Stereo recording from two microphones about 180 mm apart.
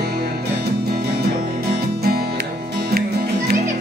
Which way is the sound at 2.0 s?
60° right (ahead or behind).